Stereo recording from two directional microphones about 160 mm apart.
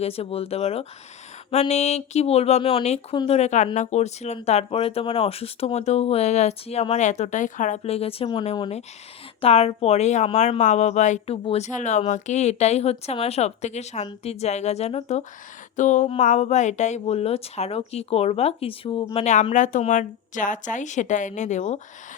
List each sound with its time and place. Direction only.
0.0 s a woman's voice: 40° left (ahead or behind)
15.7 s a sound: 50° left (ahead or behind)
16.0 s a woman's voice: 50° left (ahead or behind)